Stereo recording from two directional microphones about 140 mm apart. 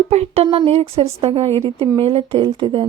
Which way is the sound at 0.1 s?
45° right (ahead or behind).